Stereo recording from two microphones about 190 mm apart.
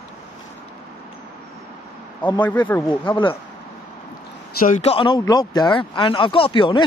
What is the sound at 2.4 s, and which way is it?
Speech, 10° left (ahead or behind).